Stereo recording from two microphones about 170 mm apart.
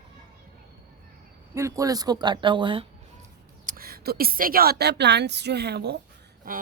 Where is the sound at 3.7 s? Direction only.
60° right (ahead or behind); by 6.0 s 75° right (ahead or behind).